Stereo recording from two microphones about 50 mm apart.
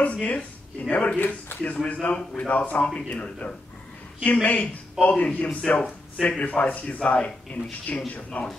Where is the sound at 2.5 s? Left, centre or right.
Left.